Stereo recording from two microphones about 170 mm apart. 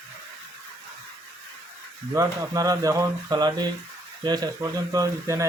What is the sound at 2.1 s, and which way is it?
Speech, 20° right (ahead or behind).